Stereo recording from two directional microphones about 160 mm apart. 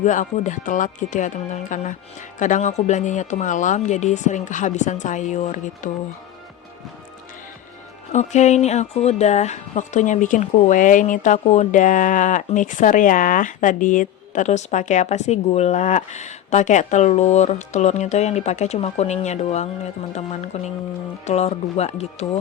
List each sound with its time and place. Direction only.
0.0 s speech: 50° left (ahead or behind)
8.1 s speech: 45° left (ahead or behind)